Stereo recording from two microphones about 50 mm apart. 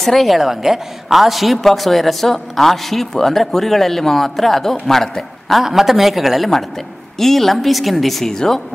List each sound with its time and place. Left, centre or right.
0.0 s a woman's voice: centre
5.6 s a woman's voice: centre